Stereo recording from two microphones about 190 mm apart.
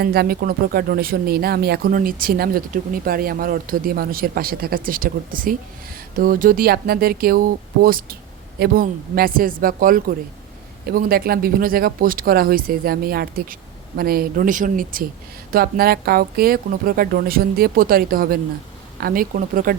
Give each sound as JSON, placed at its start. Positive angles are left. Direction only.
{"t": 0.0, "sound": "speech", "side_deg": -55}